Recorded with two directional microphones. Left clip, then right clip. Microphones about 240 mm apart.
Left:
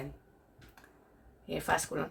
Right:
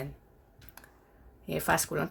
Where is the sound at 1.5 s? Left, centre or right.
Right.